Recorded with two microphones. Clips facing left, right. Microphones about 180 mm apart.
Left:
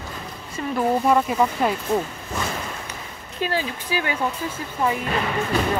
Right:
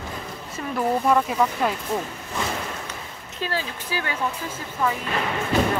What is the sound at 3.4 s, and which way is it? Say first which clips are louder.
Speech: left 3 dB; 15° left (ahead or behind).